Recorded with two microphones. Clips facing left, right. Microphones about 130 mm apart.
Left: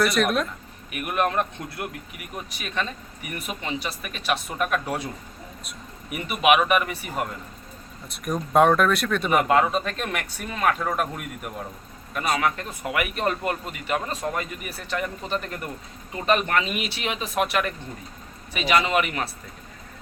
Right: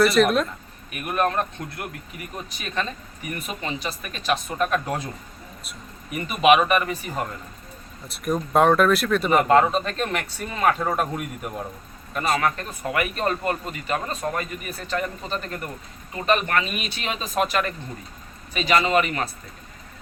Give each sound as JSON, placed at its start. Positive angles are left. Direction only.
{"t": 0.0, "sound": "a man's voice", "side_deg": 0}
{"t": 3.2, "sound": "a man's voice", "side_deg": 10}
{"t": 6.1, "sound": "a man's voice", "side_deg": 5}
{"t": 8.1, "sound": "a man's voice", "side_deg": 0}